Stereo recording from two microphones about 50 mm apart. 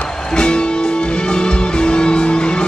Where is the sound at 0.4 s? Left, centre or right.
Centre.